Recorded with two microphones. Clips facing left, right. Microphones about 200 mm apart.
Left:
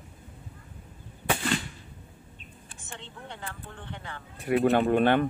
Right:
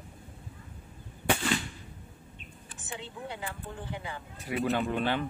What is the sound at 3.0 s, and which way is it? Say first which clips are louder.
Speech: right 3 dB; 5° right (ahead or behind).